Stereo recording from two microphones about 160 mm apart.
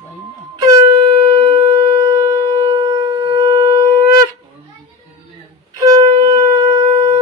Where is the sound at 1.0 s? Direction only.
30° right (ahead or behind).